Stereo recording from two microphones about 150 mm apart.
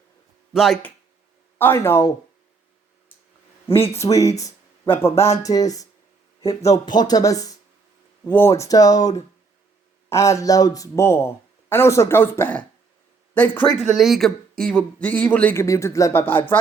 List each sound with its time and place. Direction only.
0.5 s speech: centre (ahead or behind)
1.5 s speech: 15° left (ahead or behind)
3.8 s speech: 20° left (ahead or behind)
6.5 s speech: 45° left (ahead or behind)
6.8 s speech: 25° left (ahead or behind); by 13.7 s 10° left (ahead or behind)
13.7 s speech: centre (ahead or behind); by 16.6 s 15° left (ahead or behind)